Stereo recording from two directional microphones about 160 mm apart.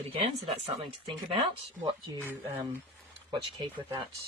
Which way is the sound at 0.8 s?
35° right (ahead or behind).